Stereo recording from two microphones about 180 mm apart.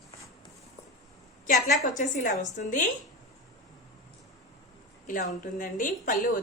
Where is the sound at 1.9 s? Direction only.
45° left (ahead or behind).